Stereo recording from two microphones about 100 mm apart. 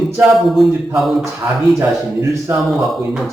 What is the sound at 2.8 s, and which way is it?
Mantra, centre (ahead or behind).